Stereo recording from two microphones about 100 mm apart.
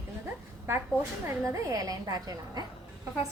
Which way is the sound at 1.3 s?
30° right (ahead or behind).